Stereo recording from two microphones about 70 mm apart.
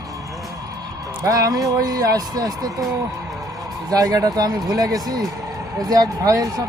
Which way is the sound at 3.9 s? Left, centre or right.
Right.